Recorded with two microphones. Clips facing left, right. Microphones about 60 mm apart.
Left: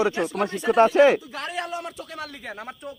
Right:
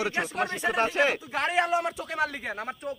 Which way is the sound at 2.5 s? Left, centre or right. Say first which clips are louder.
Right 2 dB; centre.